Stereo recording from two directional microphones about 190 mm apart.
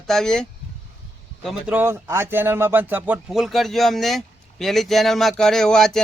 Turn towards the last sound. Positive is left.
turn(degrees=5)  # may be behind; listen again after turning